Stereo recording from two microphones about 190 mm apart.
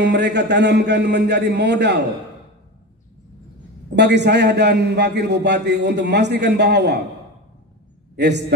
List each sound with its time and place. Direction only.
0.0 s a man's voice: 65° right (ahead or behind)
3.9 s a man's voice: 65° right (ahead or behind)
8.2 s a man's voice: 65° right (ahead or behind)